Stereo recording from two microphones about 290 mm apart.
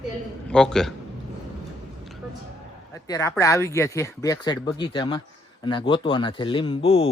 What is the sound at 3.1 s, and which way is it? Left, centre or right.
Speech, centre.